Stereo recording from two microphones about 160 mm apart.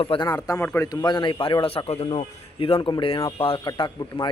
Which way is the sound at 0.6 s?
15° left (ahead or behind).